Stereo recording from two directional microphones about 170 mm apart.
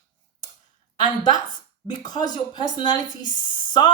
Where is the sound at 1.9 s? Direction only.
25° left (ahead or behind).